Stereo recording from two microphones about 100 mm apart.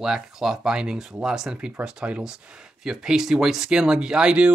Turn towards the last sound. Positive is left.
turn(degrees=-10)  # may be behind; listen again after turning